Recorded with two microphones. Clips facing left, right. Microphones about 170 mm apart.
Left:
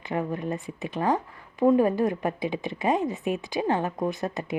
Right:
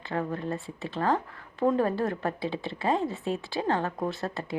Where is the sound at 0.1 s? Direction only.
15° left (ahead or behind).